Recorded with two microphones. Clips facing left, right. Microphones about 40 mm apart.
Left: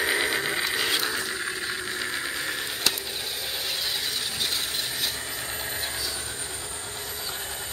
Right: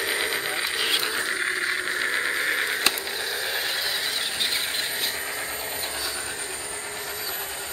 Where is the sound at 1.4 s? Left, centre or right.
Right.